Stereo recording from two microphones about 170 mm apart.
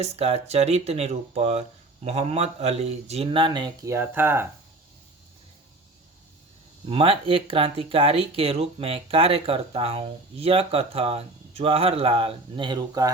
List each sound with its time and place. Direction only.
0.0 s speech: 40° right (ahead or behind); by 4.4 s 10° right (ahead or behind)
6.8 s speech: 30° right (ahead or behind)